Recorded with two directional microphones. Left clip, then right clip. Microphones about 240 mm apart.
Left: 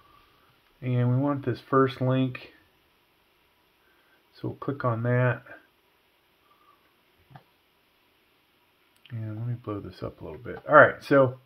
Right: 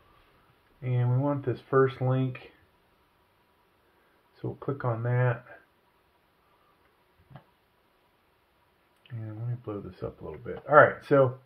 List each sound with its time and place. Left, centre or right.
0.7 s speech: left
4.4 s speech: left
9.0 s speech: left